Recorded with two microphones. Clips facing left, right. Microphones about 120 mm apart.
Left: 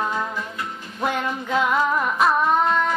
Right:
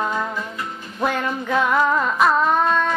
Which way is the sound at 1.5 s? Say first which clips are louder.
Right 2 dB; 20° left (ahead or behind).